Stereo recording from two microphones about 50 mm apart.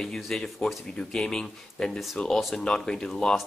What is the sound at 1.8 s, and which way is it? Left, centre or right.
Speech, centre.